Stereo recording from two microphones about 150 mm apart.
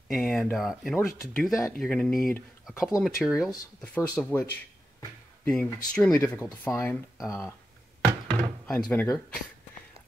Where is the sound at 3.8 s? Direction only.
10° left (ahead or behind).